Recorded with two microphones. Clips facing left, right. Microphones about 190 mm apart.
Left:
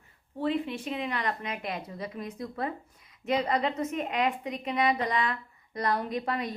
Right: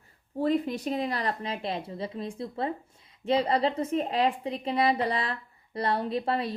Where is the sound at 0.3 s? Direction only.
40° right (ahead or behind).